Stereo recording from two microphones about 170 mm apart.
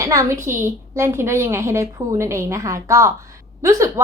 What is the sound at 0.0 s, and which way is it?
A woman's voice, 20° right (ahead or behind).